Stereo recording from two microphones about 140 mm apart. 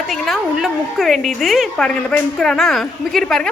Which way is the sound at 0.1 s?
Centre (ahead or behind).